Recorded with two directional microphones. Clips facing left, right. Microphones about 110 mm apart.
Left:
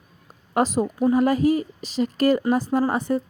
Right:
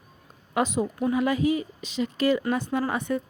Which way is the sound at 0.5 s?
40° left (ahead or behind).